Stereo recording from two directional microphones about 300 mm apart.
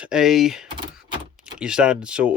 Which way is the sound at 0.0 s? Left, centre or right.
Centre.